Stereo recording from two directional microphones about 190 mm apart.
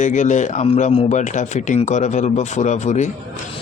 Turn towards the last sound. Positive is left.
turn(degrees=40)  # may be behind; listen again after turning